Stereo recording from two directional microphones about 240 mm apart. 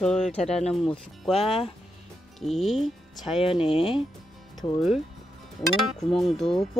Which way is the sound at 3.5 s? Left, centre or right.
Left.